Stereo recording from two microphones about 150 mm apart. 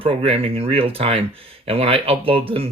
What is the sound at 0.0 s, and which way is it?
Speech, 40° right (ahead or behind).